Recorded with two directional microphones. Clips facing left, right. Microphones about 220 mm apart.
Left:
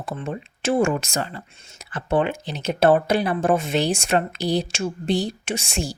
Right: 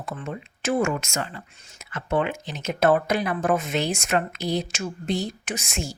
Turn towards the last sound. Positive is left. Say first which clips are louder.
# left 4 dB
turn(degrees=30)  # may be behind; listen again after turning